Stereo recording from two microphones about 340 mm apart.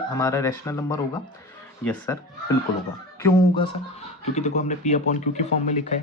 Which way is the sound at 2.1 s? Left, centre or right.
Centre.